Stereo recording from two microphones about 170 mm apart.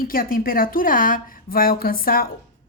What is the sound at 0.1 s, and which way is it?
A woman's voice, 60° left (ahead or behind).